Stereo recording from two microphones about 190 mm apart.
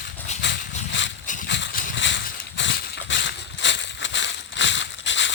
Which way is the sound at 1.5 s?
70° left (ahead or behind).